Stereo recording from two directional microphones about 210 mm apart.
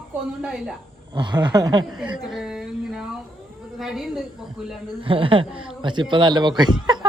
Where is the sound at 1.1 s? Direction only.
20° right (ahead or behind).